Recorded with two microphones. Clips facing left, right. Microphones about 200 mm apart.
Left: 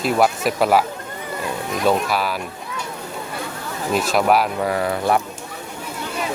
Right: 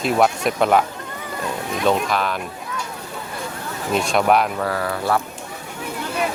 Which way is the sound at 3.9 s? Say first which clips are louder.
Even; 5° left (ahead or behind).